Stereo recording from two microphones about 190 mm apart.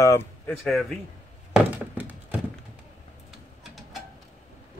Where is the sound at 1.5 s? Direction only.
5° right (ahead or behind).